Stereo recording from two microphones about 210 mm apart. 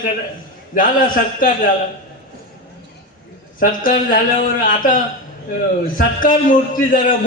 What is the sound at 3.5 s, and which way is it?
A man's voice, 40° left (ahead or behind).